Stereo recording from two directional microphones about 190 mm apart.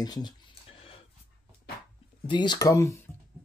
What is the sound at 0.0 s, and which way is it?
Speech, 20° left (ahead or behind).